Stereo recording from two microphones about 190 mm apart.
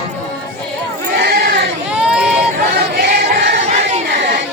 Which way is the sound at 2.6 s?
55° right (ahead or behind).